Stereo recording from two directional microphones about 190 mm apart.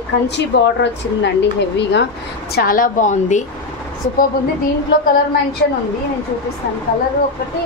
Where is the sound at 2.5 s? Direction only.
45° left (ahead or behind).